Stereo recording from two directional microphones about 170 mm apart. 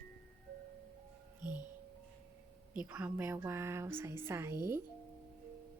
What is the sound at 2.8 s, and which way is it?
Speech, 10° right (ahead or behind).